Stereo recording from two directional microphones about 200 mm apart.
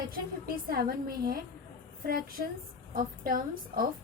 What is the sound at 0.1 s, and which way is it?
A woman's voice, 50° right (ahead or behind).